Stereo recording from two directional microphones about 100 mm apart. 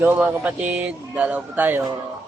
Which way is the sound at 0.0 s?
20° right (ahead or behind).